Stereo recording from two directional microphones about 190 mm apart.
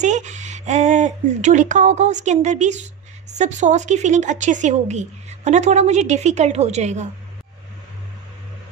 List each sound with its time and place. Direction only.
0.0 s a woman's voice: 40° right (ahead or behind)